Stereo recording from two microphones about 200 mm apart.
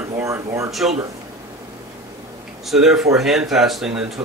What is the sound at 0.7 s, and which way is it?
Speech, centre (ahead or behind).